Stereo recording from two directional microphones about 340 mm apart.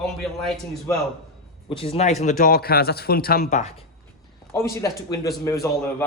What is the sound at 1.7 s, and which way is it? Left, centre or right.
A man's voice, centre.